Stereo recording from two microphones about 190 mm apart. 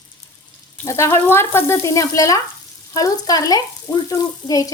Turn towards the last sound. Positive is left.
turn(degrees=20)  # may be behind; listen again after turning